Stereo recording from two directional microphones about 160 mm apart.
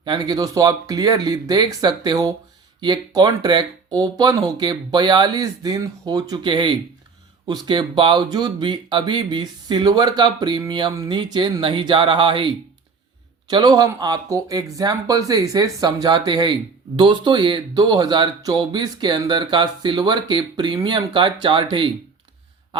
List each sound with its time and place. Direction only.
0.0 s speech: 25° right (ahead or behind)